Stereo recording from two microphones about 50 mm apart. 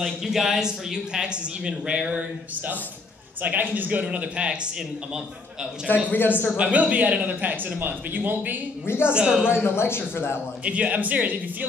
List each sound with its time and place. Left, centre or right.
0.0 s a man's voice: centre; by 4.0 s right
4.1 s speech: right
6.1 s a man's voice: left
6.5 s a man's voice: right
9.0 s speech: centre
9.6 s speech: left
10.6 s speech: right